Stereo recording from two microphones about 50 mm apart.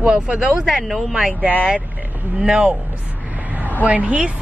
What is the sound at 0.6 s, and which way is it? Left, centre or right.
Speech, centre.